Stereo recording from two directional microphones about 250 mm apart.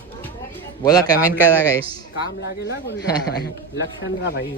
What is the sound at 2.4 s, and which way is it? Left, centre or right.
Speech, left.